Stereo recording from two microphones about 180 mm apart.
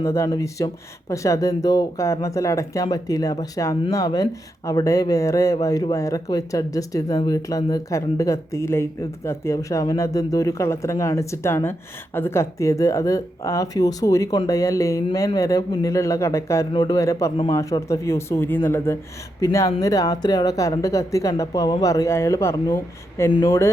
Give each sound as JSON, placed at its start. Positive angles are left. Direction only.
{"t": 0.0, "sound": "speech", "side_deg": 15}